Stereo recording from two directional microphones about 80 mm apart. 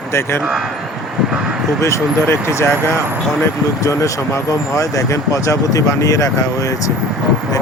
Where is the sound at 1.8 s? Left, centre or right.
Left.